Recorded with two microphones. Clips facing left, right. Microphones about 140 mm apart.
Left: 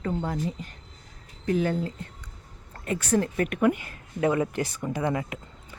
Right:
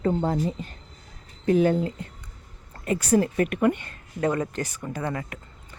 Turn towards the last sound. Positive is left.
turn(degrees=15)  # may be behind; listen again after turning